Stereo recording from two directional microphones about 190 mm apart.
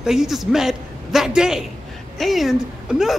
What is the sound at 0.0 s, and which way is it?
Speech, centre (ahead or behind).